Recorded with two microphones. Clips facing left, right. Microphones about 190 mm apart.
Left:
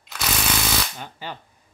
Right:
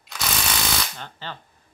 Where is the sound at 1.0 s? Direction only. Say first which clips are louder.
Left 2 dB; 10° left (ahead or behind).